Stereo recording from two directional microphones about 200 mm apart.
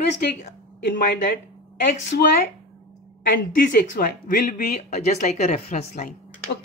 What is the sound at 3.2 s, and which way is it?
Speech, 45° left (ahead or behind).